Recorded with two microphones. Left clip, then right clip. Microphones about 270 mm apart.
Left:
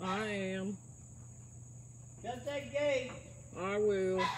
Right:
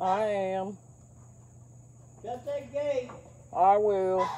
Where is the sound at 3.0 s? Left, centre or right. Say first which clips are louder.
Right 5 dB; centre.